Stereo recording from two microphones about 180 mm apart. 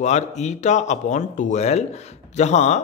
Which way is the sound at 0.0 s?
40° left (ahead or behind).